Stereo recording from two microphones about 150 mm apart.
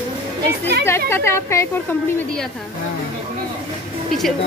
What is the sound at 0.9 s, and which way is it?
A woman's voice, 15° left (ahead or behind).